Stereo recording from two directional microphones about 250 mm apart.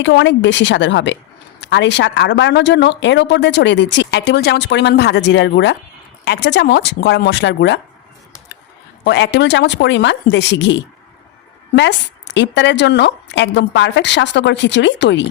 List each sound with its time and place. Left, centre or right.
0.0 s speech: left
9.0 s speech: left